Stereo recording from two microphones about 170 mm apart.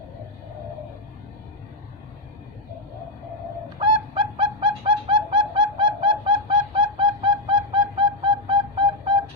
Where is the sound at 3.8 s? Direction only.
25° right (ahead or behind).